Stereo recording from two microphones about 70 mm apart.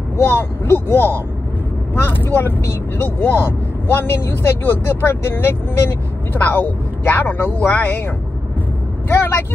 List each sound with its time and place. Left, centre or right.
0.2 s speech: left
9.1 s speech: left